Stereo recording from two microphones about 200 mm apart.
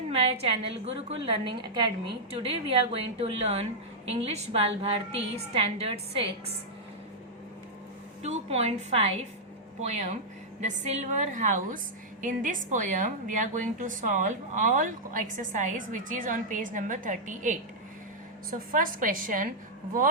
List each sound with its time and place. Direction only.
0.1 s a woman's voice: 30° right (ahead or behind)
8.2 s a woman's voice: 35° right (ahead or behind)
11.3 s a woman's voice: 40° right (ahead or behind)
18.7 s a woman's voice: 40° right (ahead or behind)